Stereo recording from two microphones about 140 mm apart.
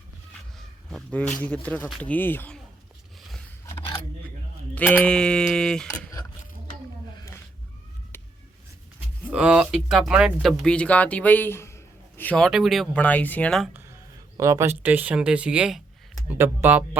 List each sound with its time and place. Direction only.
0.9 s a man's voice: 5° left (ahead or behind)
4.7 s a sound: 10° left (ahead or behind)
8.1 s vehicle: 15° left (ahead or behind)
9.3 s speech: 10° right (ahead or behind); by 12.5 s 10° left (ahead or behind)
12.5 s a sound: centre (ahead or behind)
12.9 s a man's voice: 10° left (ahead or behind)
13.7 s speech: 20° right (ahead or behind)